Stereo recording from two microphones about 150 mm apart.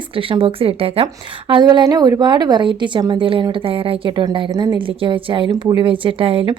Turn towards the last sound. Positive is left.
turn(degrees=-40)  # may be behind; listen again after turning